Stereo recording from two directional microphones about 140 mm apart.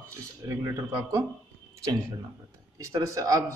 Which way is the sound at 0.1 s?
25° right (ahead or behind).